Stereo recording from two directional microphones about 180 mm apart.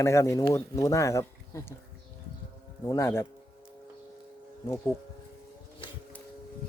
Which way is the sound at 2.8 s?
15° left (ahead or behind).